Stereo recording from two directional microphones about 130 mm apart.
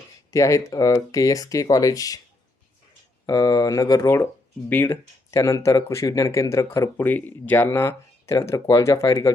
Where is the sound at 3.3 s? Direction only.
30° left (ahead or behind).